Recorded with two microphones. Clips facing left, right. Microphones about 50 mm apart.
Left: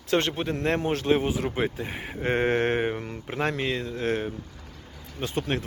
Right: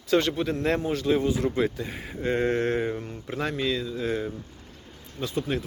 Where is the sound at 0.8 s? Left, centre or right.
Left.